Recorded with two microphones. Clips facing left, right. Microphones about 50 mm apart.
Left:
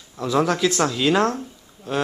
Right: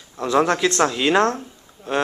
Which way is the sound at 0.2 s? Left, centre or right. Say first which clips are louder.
Right 2 dB; right.